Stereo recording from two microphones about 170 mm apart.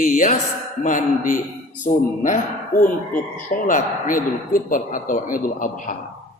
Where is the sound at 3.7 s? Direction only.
50° left (ahead or behind).